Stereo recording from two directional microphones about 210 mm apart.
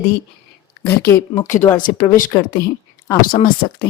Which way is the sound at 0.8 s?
10° left (ahead or behind).